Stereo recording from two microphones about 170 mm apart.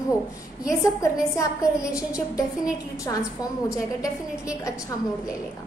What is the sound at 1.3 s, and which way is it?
A woman's voice, 20° left (ahead or behind).